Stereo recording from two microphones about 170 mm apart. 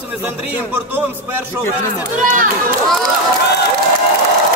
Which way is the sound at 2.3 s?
55° right (ahead or behind).